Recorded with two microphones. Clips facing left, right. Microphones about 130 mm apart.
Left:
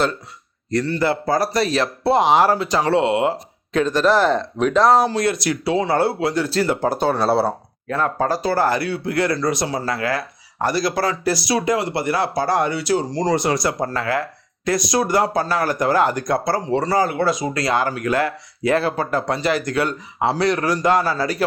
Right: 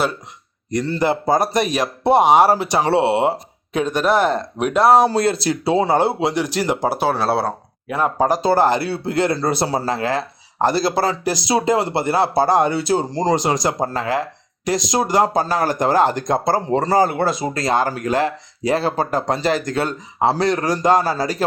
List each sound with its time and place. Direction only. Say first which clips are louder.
0.9 s speech: right 3 dB; 20° right (ahead or behind)
2.7 s speech: right 1 dB; 25° right (ahead or behind)
3.7 s speech: left 1 dB; 10° right (ahead or behind)
5.1 s speech: right 2 dB; 30° right (ahead or behind); by 7.5 s centre (ahead or behind)
7.9 s speech: right 2 dB; 15° right (ahead or behind)
15.4 s speech: right 1 dB; 35° right (ahead or behind)